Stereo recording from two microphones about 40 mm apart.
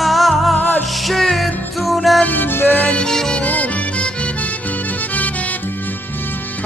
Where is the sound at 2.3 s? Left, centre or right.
Left.